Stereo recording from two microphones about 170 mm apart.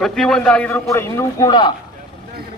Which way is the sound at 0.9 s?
15° left (ahead or behind).